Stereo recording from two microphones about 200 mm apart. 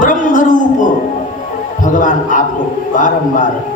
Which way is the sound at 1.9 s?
40° left (ahead or behind).